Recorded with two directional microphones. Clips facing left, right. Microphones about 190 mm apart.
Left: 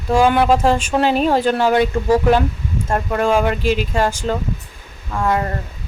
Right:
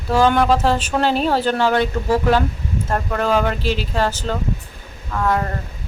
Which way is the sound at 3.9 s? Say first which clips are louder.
Left 2 dB; 10° left (ahead or behind).